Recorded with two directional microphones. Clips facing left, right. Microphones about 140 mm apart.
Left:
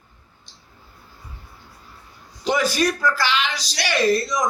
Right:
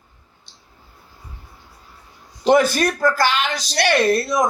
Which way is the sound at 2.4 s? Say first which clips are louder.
Right 5 dB; 55° right (ahead or behind).